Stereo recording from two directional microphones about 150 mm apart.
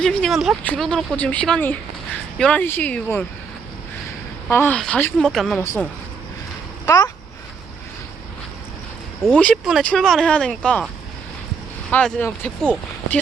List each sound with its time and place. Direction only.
0.0 s a woman's voice: 5° left (ahead or behind)
4.4 s a woman's voice: 10° left (ahead or behind)
5.5 s a woman's voice: 15° left (ahead or behind)
6.8 s speech: 25° left (ahead or behind)
9.2 s a woman's voice: 5° left (ahead or behind)
11.9 s a woman's voice: 5° left (ahead or behind)